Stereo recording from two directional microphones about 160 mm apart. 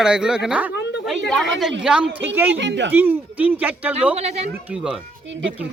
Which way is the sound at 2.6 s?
90° right.